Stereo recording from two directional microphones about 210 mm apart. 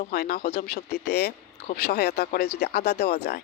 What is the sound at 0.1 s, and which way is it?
Speech, 50° left (ahead or behind).